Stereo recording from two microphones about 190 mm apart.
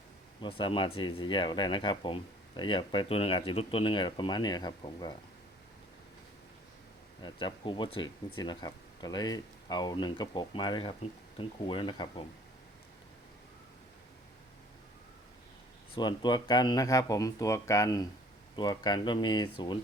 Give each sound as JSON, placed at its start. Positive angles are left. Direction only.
{"t": 0.4, "sound": "speech", "side_deg": 25}
{"t": 7.2, "sound": "speech", "side_deg": 25}
{"t": 16.0, "sound": "speech", "side_deg": 25}